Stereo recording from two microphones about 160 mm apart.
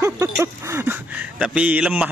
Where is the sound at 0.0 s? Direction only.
20° right (ahead or behind).